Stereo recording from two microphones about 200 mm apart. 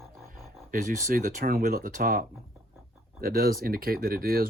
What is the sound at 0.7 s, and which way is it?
Speech, 45° right (ahead or behind).